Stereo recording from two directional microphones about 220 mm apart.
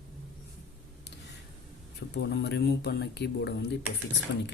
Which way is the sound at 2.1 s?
50° left (ahead or behind).